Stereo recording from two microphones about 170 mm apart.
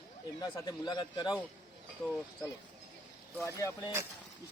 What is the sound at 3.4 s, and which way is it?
Speech, 20° left (ahead or behind).